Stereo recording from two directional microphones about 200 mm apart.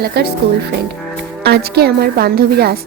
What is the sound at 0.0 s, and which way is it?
A woman's voice, 55° right (ahead or behind).